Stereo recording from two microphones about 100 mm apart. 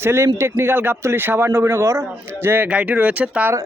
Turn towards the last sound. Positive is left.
turn(degrees=-15)  # may be behind; listen again after turning